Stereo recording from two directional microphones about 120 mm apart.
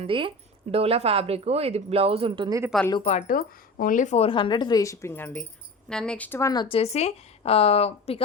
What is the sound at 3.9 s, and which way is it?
Speech, 85° left.